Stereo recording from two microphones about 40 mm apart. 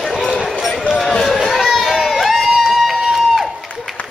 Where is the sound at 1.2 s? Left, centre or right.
Centre.